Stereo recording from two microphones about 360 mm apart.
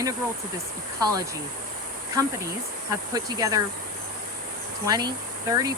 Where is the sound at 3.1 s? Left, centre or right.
Centre.